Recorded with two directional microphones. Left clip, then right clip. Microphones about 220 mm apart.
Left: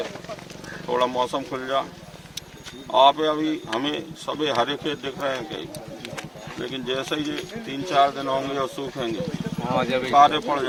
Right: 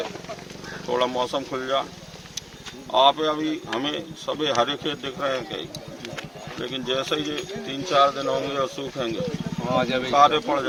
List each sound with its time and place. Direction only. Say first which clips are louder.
0.9 s speech: left 1 dB; centre (ahead or behind)
2.9 s speech: left 2 dB; centre (ahead or behind)
9.6 s speech: even; 15° right (ahead or behind)
10.1 s speech: left 1 dB; centre (ahead or behind)